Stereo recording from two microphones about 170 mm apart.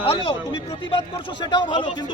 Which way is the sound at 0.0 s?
35° left (ahead or behind).